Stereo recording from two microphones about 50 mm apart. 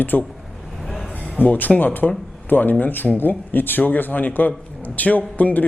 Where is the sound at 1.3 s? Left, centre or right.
Left.